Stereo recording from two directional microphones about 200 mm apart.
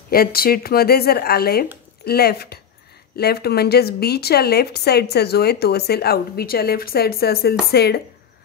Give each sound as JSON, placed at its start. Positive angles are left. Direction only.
{"t": 0.1, "sound": "a woman's voice", "side_deg": 50}